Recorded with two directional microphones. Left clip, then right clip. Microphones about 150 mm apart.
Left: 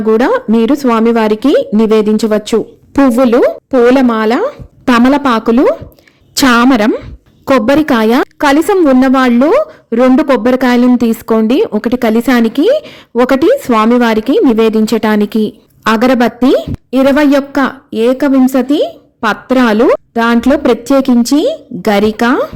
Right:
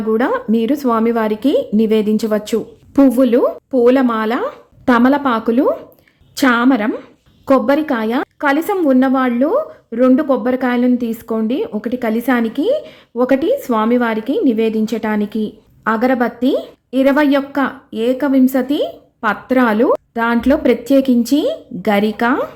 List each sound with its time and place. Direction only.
0.2 s a woman's voice: 35° left (ahead or behind)
6.9 s a sound: 30° left (ahead or behind)
7.5 s a woman's voice: 45° left (ahead or behind)